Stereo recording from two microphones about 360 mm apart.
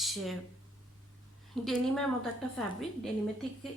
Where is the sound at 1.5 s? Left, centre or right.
Centre.